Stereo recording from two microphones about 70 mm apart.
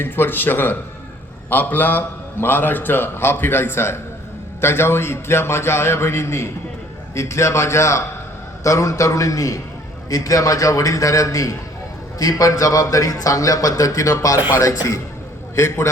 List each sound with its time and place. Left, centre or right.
0.0 s a man's voice: left
15.5 s a man's voice: left